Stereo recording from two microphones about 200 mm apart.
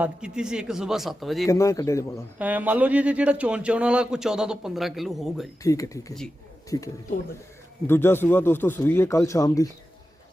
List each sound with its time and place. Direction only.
0.0 s speech: 5° right (ahead or behind)
1.5 s speech: 15° left (ahead or behind)
2.4 s speech: 10° right (ahead or behind)
5.6 s speech: 15° left (ahead or behind)